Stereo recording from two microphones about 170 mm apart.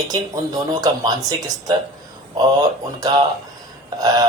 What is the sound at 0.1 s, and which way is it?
Speech, 20° right (ahead or behind).